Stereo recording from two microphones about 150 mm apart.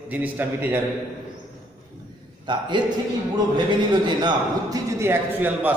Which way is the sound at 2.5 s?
30° right (ahead or behind).